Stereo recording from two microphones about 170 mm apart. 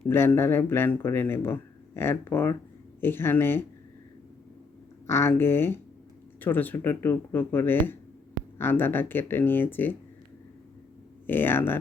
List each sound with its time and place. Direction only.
0.0 s speech: 15° left (ahead or behind)
5.0 s speech: 15° left (ahead or behind)
11.3 s speech: 10° left (ahead or behind)